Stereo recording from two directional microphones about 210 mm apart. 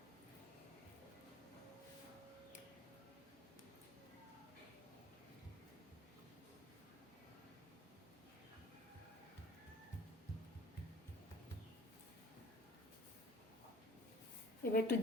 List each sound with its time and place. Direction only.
14.6 s a woman's voice: 50° left (ahead or behind)